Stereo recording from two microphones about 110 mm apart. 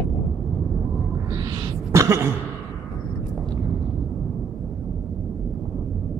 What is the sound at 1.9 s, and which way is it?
Throat clearing, 25° right (ahead or behind).